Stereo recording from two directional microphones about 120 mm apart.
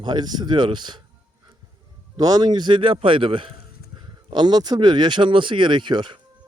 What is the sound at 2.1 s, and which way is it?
A man's voice, 30° right (ahead or behind).